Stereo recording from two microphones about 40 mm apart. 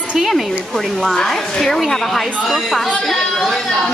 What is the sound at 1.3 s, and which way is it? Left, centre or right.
A woman's voice, centre.